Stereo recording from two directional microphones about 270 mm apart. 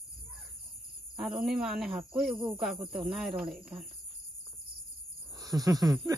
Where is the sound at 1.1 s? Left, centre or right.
Centre.